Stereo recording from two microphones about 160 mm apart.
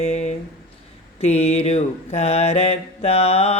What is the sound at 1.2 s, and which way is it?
Mantra, 40° left (ahead or behind).